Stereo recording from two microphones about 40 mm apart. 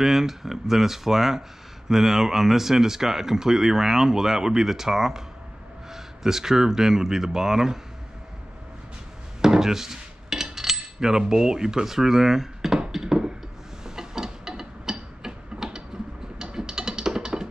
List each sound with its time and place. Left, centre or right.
0.0 s speech: centre
9.4 s cutlery: centre
12.9 s a sound: centre
16.5 s music: centre